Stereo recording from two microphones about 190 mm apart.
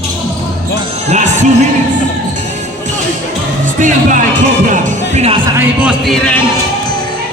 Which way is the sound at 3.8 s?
40° right (ahead or behind).